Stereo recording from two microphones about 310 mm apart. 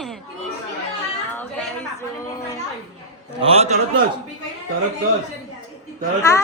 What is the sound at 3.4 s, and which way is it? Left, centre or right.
Speech, centre.